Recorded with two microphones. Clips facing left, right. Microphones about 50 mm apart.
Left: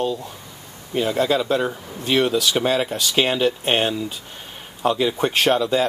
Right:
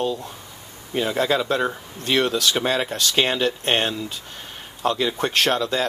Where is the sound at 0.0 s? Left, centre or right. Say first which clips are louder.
Left 1 dB; centre.